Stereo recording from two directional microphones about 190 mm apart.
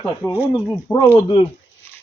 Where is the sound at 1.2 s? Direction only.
25° left (ahead or behind).